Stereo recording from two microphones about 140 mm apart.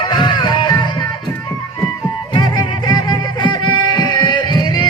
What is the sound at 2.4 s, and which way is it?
Music, 30° left (ahead or behind).